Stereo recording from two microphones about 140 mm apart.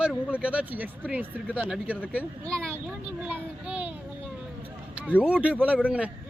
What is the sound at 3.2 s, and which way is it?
Speech, 10° right (ahead or behind).